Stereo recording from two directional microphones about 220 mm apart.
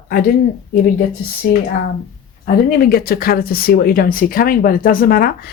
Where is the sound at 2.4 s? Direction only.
45° left (ahead or behind).